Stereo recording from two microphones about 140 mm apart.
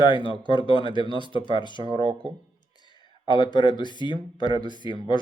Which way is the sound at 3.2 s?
35° left (ahead or behind).